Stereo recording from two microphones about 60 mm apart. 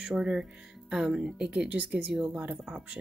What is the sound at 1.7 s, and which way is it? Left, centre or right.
Speech, right.